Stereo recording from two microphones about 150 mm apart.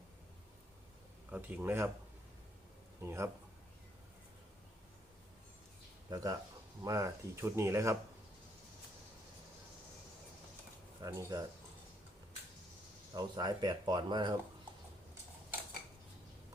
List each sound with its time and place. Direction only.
1.3 s speech: 10° right (ahead or behind)
3.0 s speech: 20° right (ahead or behind)
6.1 s speech: 25° right (ahead or behind)
11.0 s speech: 25° right (ahead or behind)
13.1 s speech: 30° right (ahead or behind)